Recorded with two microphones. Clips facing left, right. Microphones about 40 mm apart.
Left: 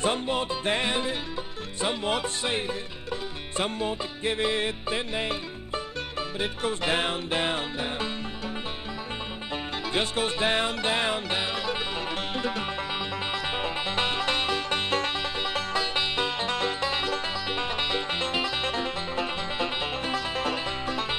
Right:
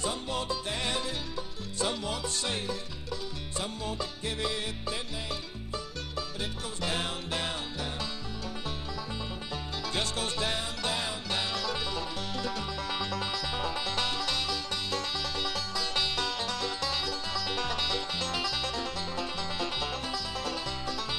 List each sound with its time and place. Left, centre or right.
0.0 s music: left
3.5 s music: left
9.9 s music: left
10.5 s music: left